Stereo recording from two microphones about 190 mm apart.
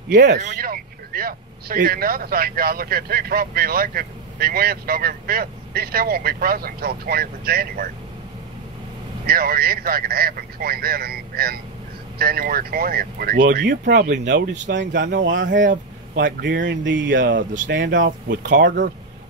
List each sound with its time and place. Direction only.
0.1 s speech: 65° right (ahead or behind)
0.4 s speech: 45° right (ahead or behind)
9.2 s speech: 55° right (ahead or behind); by 15.5 s 80° right
15.5 s speech: 40° right (ahead or behind)
16.2 s speech: 65° right (ahead or behind)